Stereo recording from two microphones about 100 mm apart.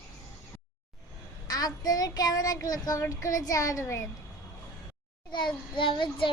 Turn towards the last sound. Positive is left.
turn(degrees=55)  # may be behind; listen again after turning